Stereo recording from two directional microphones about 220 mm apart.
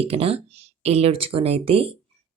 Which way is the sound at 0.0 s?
25° right (ahead or behind).